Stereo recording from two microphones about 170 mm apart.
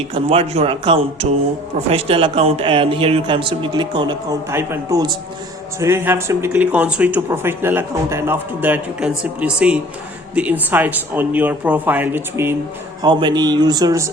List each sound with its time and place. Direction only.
0.1 s speech: 35° right (ahead or behind); by 12.5 s 15° right (ahead or behind)
13.0 s speech: 25° right (ahead or behind)